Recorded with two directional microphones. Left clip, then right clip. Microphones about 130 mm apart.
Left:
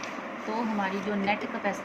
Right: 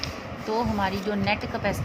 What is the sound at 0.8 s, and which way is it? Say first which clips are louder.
Speech: right 3 dB; 60° right (ahead or behind).